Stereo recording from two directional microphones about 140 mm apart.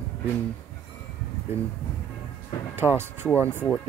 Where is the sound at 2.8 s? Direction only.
15° right (ahead or behind).